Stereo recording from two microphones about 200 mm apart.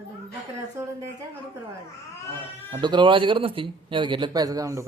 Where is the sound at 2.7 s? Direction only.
25° right (ahead or behind).